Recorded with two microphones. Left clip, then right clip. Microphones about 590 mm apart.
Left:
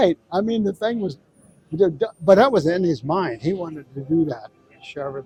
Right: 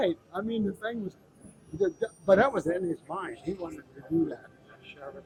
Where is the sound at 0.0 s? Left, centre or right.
Left.